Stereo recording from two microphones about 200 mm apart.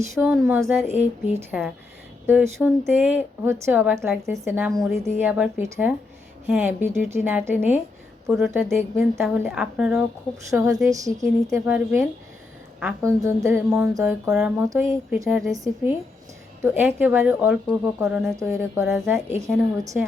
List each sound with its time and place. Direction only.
0.1 s a woman's voice: 5° right (ahead or behind)
0.9 s a woman's voice: 10° right (ahead or behind)
10.8 s speech: 15° right (ahead or behind)
15.5 s speech: 15° right (ahead or behind)
18.3 s speech: 15° right (ahead or behind)